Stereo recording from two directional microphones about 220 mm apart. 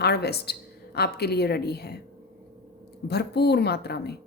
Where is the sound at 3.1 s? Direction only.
50° left (ahead or behind).